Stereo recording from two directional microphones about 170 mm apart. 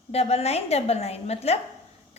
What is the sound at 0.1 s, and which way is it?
A woman's voice, 40° left (ahead or behind).